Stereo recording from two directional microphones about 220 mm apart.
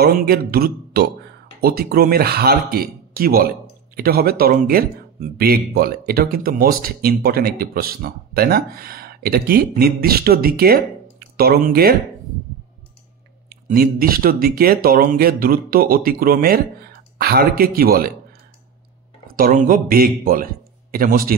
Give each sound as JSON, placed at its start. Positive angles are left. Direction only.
{"t": 0.0, "sound": "speech", "side_deg": -45}
{"t": 13.5, "sound": "speech", "side_deg": -40}
{"t": 19.3, "sound": "speech", "side_deg": -40}